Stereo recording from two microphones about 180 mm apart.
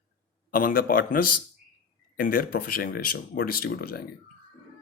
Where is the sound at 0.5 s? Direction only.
55° left (ahead or behind).